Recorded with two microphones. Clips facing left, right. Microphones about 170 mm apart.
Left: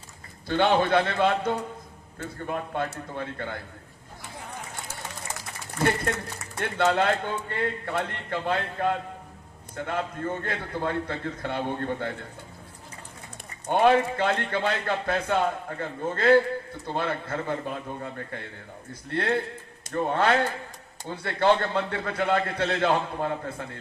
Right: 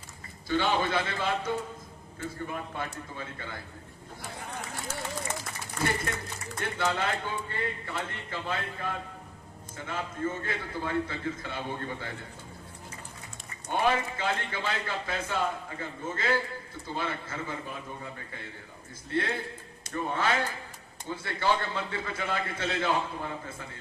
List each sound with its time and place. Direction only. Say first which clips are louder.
0.4 s speech: left 5 dB; 55° left (ahead or behind)
6.4 s speech: left 6 dB; 65° left (ahead or behind)
13.7 s speech: left 7 dB; 55° left (ahead or behind)